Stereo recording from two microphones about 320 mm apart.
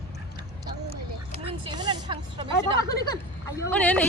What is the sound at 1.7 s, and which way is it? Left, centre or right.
Speech, centre.